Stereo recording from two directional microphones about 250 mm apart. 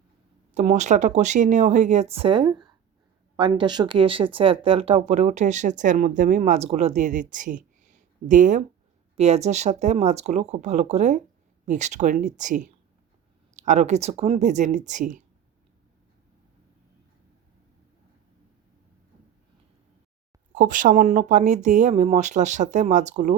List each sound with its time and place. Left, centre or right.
0.5 s speech: right
20.5 s speech: right